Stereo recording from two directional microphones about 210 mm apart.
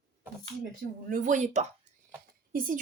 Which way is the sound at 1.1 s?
35° right (ahead or behind).